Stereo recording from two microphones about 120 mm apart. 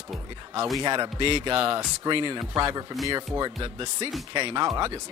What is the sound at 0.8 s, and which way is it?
Speech, 40° right (ahead or behind).